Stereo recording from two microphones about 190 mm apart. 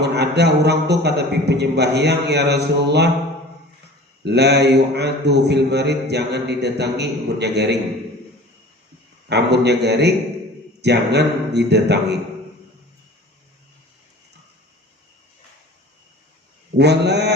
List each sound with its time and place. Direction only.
0.0 s a man's voice: 60° right (ahead or behind)
4.2 s a man's voice: 60° right (ahead or behind)
9.3 s a man's voice: 60° right (ahead or behind)
16.7 s a man's voice: 60° right (ahead or behind)